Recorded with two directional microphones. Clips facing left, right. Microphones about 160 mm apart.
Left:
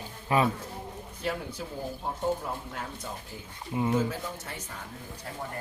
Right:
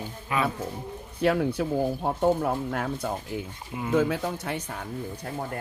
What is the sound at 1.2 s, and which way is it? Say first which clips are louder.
Speech: right 10 dB; 65° right (ahead or behind).